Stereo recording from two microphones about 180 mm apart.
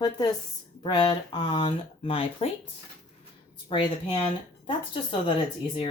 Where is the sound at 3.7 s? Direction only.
25° left (ahead or behind).